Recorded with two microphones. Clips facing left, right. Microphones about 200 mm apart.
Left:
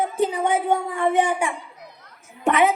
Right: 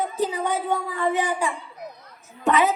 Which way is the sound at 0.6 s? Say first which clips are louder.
Left 3 dB; 25° left (ahead or behind).